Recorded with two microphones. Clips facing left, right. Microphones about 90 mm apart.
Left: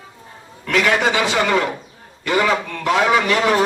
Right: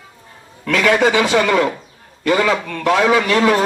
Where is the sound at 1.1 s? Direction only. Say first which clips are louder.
Right 3 dB; 25° left (ahead or behind).